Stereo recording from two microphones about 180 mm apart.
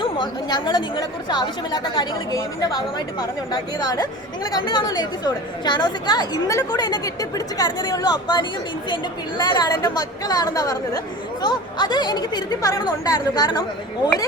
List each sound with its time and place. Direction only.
0.0 s a woman's voice: 25° left (ahead or behind)
3.2 s a woman's voice: 25° left (ahead or behind)